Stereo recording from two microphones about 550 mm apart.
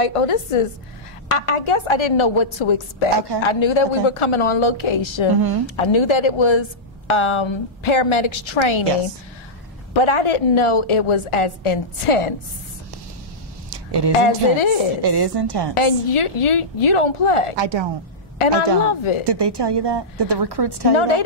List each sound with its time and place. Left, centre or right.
0.0 s a woman's voice: left
9.9 s a woman's voice: left
13.7 s a sound: right
14.2 s a woman's voice: left
15.0 s a woman's voice: right
15.7 s a woman's voice: left
17.6 s a woman's voice: right
18.9 s a woman's voice: left
19.2 s a woman's voice: right
20.9 s a woman's voice: left